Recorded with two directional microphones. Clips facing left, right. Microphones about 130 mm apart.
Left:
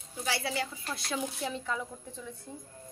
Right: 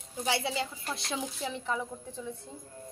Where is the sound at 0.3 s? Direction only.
25° right (ahead or behind).